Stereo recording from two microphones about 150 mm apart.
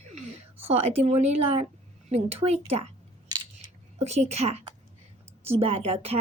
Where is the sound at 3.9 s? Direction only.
45° right (ahead or behind).